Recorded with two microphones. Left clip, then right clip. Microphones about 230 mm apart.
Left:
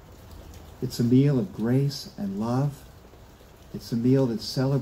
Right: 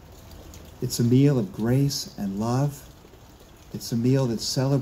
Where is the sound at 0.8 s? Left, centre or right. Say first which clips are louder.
Right 1 dB; right.